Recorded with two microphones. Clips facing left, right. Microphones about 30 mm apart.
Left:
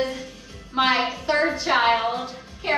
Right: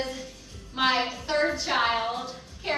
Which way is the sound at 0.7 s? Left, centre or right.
Centre.